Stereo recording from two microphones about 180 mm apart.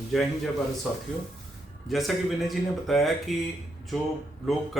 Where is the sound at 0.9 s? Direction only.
Centre (ahead or behind).